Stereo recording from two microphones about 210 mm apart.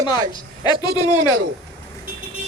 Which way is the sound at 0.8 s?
20° left (ahead or behind).